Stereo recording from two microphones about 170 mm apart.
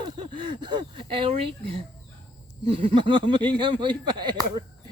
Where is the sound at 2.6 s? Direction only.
30° right (ahead or behind).